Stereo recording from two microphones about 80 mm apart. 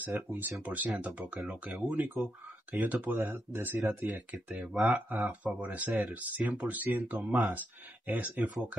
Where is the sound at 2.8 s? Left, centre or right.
Right.